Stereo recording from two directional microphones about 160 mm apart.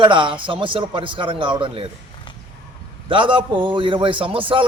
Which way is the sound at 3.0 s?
30° right (ahead or behind).